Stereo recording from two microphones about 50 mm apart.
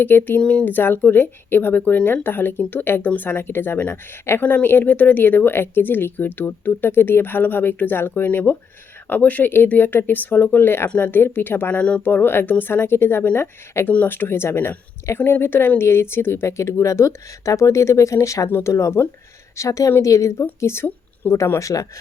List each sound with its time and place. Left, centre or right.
0.0 s speech: left
0.4 s speech: left
0.7 s speech: left
1.8 s speech: left
10.8 s speech: left
11.7 s speech: left
12.0 s speech: left
16.5 s a woman's voice: left